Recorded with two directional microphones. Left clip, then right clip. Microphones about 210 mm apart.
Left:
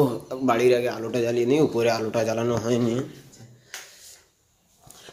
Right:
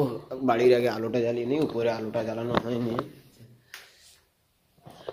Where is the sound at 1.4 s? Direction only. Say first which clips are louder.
Left 6 dB; 5° left (ahead or behind).